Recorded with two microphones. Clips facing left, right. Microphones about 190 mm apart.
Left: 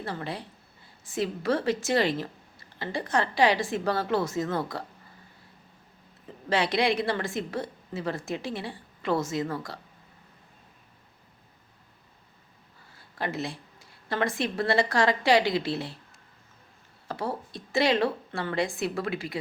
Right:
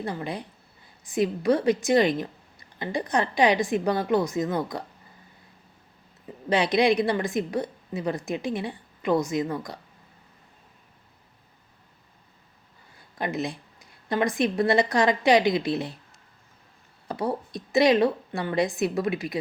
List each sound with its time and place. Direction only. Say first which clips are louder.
0.0 s a woman's voice: right 3 dB; 15° right (ahead or behind)
6.5 s a woman's voice: right 4 dB; 20° right (ahead or behind)
13.1 s a woman's voice: right 3 dB; 15° right (ahead or behind)
17.1 s a woman's voice: right 4 dB; 20° right (ahead or behind)